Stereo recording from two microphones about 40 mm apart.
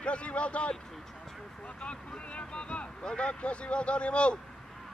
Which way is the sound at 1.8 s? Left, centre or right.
Left.